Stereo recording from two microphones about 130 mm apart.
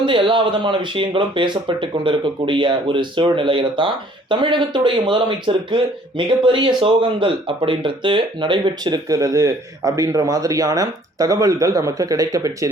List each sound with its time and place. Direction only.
0.0 s speech: 40° right (ahead or behind)